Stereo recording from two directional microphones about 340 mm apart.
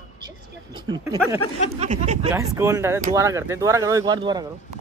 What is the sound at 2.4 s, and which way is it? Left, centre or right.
Speech, centre.